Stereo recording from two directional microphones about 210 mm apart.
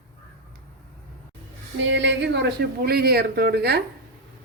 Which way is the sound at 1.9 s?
60° right (ahead or behind).